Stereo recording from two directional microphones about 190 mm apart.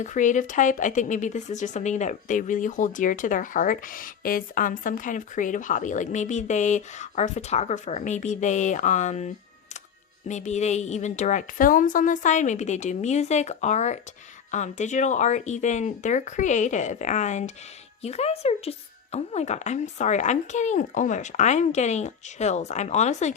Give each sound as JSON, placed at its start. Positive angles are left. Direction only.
{"t": 0.0, "sound": "speech", "side_deg": 40}